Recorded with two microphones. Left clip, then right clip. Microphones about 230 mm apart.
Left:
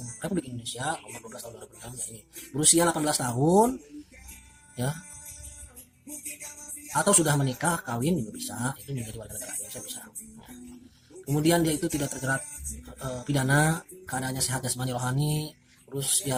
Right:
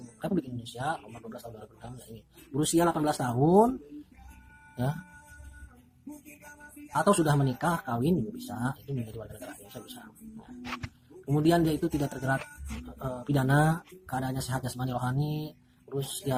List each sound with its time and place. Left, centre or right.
0.2 s speech: left
6.9 s speech: left
11.3 s speech: left